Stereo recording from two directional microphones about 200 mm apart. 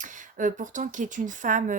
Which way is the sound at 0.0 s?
40° right (ahead or behind).